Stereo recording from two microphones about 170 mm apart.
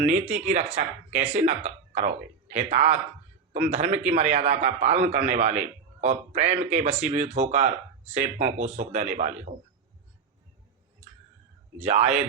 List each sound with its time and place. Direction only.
0.0 s a man's voice: 45° right (ahead or behind)
11.9 s speech: 40° right (ahead or behind)